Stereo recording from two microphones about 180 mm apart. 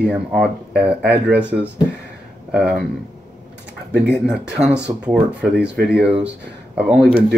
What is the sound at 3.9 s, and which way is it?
Speech, 65° right (ahead or behind).